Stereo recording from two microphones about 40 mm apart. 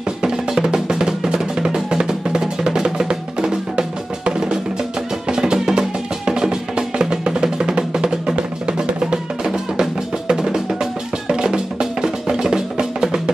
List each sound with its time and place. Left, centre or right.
0.2 s drum: centre
5.3 s music: centre